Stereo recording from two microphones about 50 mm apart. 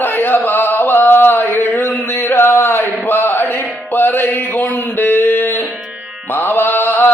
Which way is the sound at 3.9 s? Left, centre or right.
Left.